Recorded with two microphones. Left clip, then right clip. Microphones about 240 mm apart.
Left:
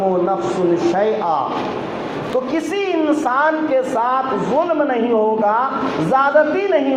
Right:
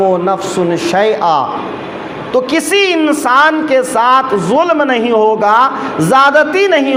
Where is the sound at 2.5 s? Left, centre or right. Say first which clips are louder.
Right 8 dB; right.